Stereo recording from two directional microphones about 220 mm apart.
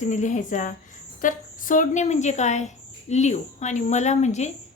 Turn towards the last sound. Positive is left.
turn(degrees=30)  # may be behind; listen again after turning